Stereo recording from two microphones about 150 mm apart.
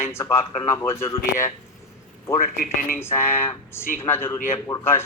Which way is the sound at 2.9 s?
15° left (ahead or behind).